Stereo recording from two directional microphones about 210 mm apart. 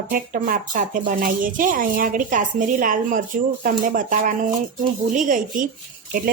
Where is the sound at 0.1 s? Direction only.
40° right (ahead or behind).